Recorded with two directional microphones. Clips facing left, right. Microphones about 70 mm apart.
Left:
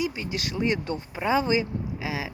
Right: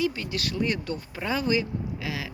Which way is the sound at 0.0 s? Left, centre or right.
Centre.